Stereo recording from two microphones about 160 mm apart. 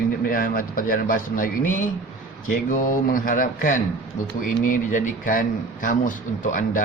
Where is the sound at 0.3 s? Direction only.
60° left (ahead or behind).